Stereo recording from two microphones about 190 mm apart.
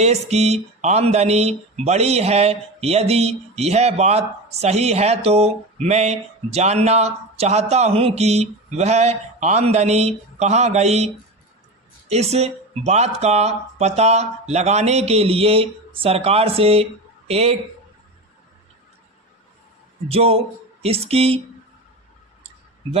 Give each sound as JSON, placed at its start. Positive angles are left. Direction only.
{"t": 0.0, "sound": "speech", "side_deg": -35}
{"t": 20.1, "sound": "speech", "side_deg": -30}